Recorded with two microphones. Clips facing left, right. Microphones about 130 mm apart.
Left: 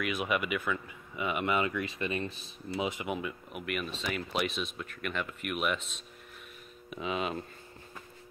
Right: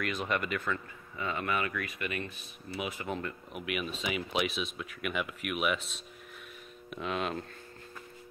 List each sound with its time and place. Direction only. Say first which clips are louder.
0.0 s speech: left 1 dB; 5° left (ahead or behind); by 2.9 s 30° left (ahead or behind)
2.9 s speech: left 2 dB; 20° left (ahead or behind)
3.2 s speech: left 1 dB; 5° left (ahead or behind)